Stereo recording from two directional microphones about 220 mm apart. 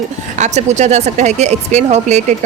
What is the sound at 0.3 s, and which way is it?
Speech, 30° right (ahead or behind).